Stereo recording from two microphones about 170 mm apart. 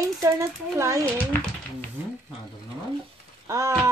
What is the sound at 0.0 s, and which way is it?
Speech, 20° right (ahead or behind).